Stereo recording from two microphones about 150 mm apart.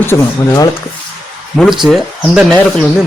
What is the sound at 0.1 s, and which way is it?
Speech, 25° left (ahead or behind).